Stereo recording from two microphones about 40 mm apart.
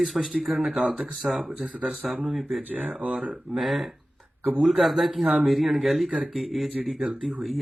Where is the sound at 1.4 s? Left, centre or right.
Right.